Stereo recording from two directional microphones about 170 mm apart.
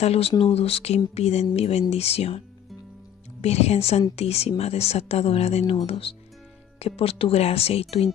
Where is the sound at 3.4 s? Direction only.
40° left (ahead or behind).